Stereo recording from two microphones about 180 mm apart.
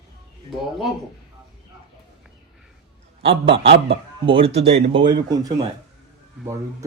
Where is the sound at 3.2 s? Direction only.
30° right (ahead or behind).